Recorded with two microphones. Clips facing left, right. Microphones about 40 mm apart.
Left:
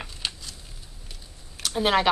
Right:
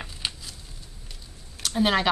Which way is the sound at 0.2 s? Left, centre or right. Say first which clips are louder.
Even; centre.